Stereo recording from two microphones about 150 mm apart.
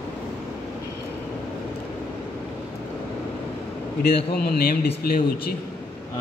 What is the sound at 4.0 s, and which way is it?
A man's voice, 90° left.